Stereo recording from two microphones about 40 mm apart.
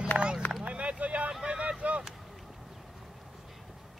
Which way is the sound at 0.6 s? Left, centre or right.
Right.